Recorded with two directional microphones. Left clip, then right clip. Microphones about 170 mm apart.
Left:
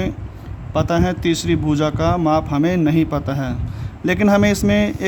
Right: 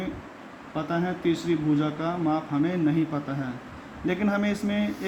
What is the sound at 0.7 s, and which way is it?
Speech, 75° left (ahead or behind).